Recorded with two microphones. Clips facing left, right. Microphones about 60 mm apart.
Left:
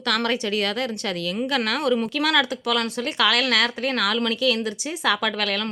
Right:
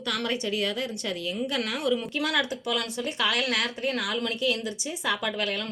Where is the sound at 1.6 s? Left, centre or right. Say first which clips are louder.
Left 4 dB; left.